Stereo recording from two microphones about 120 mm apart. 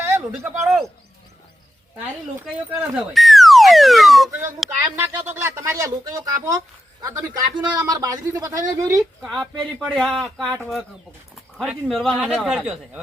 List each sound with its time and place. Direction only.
0.3 s speech: 5° right (ahead or behind)
2.7 s speech: 10° right (ahead or behind)
4.3 s a man's voice: 20° right (ahead or behind)
9.2 s speech: 5° left (ahead or behind)
11.9 s speech: centre (ahead or behind)